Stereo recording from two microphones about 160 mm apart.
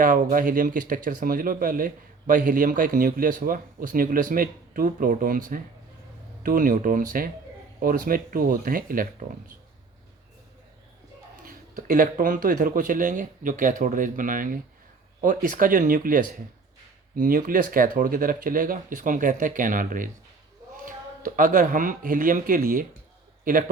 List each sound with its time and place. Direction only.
0.0 s speech: 55° right (ahead or behind)
11.4 s a man's voice: 60° right (ahead or behind)